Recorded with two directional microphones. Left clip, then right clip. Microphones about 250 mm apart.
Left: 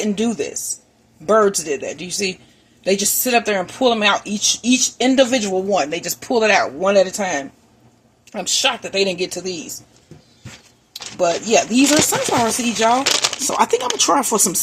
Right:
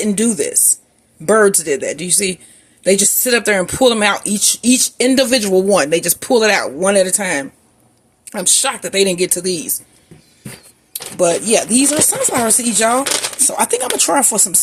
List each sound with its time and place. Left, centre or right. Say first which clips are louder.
0.0 s speech: right 4 dB; right
11.2 s speech: right 2 dB; right